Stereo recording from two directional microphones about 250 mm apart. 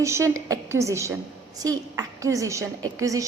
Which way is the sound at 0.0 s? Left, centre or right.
Centre.